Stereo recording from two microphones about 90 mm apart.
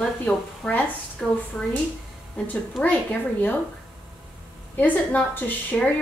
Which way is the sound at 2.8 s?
20° left (ahead or behind).